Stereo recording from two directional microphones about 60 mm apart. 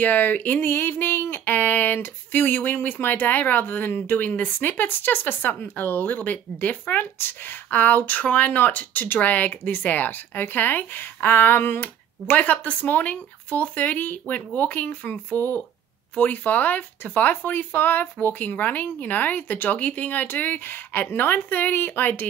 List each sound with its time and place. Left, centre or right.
0.0 s speech: left